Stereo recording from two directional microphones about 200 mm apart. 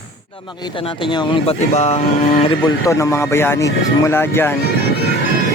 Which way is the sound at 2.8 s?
15° left (ahead or behind).